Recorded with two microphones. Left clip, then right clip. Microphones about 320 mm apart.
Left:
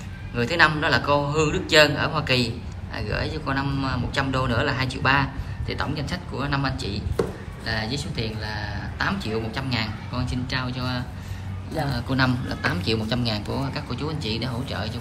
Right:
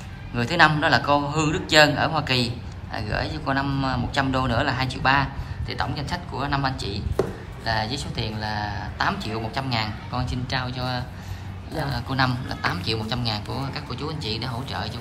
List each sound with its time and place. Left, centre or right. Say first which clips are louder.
0.4 s a man's voice: right 1 dB; centre